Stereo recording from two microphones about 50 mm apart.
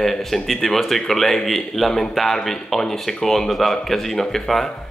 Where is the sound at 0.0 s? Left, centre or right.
Centre.